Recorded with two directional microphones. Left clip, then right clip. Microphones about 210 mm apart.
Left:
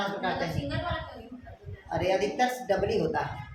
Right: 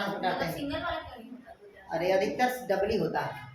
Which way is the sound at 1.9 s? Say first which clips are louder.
Even; 15° left (ahead or behind).